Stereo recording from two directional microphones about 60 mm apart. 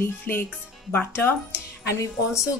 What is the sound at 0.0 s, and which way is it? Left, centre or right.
Speech, left.